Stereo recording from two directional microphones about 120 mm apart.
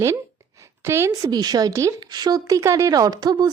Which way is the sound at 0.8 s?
20° right (ahead or behind).